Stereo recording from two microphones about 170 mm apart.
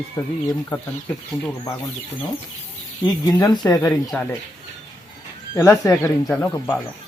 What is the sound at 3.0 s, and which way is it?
Speech, 20° left (ahead or behind).